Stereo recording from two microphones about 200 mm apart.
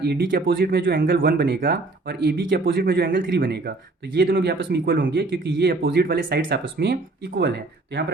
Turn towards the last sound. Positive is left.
turn(degrees=-55)  # may be behind; listen again after turning